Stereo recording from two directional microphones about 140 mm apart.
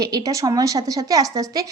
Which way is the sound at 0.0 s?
25° right (ahead or behind).